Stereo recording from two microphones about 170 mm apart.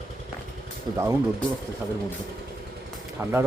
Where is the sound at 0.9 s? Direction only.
25° right (ahead or behind).